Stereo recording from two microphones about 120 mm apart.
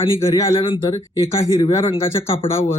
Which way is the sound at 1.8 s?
50° left (ahead or behind).